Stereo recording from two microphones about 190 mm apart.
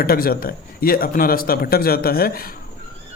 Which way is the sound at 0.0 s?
50° left (ahead or behind).